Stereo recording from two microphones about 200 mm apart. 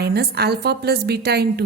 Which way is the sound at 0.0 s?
55° right (ahead or behind).